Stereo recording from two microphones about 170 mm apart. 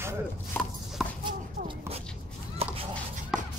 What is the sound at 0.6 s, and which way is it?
Clip-clop, 10° left (ahead or behind).